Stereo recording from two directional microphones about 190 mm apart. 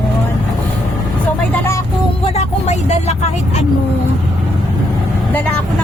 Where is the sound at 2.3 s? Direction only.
35° left (ahead or behind).